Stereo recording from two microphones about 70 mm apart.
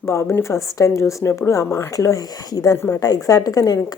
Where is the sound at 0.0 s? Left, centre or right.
Left.